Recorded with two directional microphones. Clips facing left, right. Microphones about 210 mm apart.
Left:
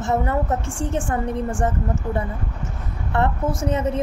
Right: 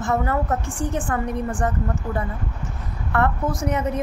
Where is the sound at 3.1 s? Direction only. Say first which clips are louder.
Even; 25° left (ahead or behind).